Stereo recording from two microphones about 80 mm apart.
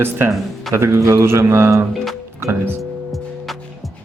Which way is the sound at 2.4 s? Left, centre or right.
Right.